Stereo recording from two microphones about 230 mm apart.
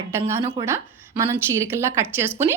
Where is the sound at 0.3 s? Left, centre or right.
Centre.